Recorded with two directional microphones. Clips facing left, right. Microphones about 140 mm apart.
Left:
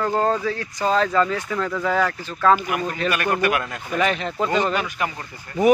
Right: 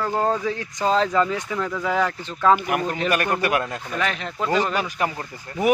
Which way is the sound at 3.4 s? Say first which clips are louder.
Left 1 dB; 30° right (ahead or behind).